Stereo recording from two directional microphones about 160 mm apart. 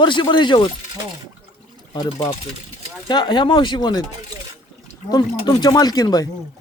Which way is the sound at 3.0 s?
25° left (ahead or behind).